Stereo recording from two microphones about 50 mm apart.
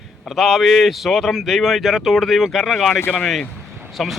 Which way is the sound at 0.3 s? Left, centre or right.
Centre.